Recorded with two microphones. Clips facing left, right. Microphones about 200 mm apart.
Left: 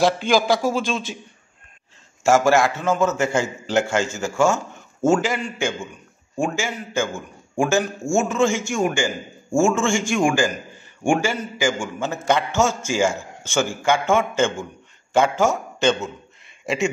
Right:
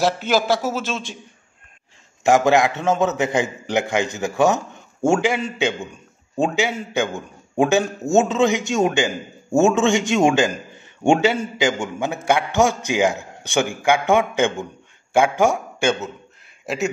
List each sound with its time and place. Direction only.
0.0 s a man's voice: 5° right (ahead or behind)
2.2 s a man's voice: 20° right (ahead or behind); by 16.9 s 5° right (ahead or behind)